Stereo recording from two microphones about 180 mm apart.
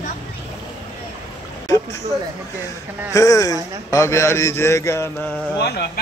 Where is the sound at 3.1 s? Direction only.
15° left (ahead or behind).